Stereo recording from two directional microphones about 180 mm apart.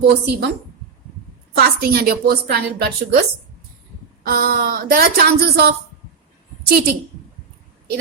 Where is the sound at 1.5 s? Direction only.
60° right (ahead or behind).